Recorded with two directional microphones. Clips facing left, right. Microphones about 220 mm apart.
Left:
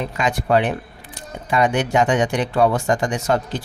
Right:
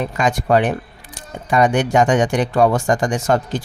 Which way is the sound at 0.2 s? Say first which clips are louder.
Right 2 dB; 45° right (ahead or behind).